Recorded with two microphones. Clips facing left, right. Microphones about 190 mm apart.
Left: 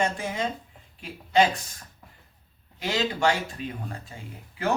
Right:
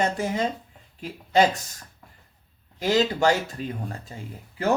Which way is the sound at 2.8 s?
40° right (ahead or behind).